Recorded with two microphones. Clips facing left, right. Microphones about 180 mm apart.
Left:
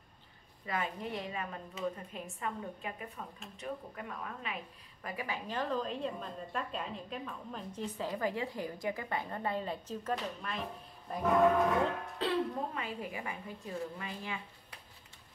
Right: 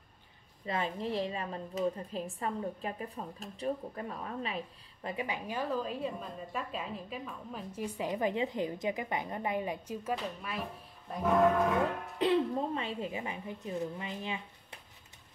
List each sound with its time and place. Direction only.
0.7 s a woman's voice: 30° right (ahead or behind)
5.0 s speech: 20° right (ahead or behind)
5.5 s a woman's voice: 10° right (ahead or behind)
12.2 s a woman's voice: 15° right (ahead or behind)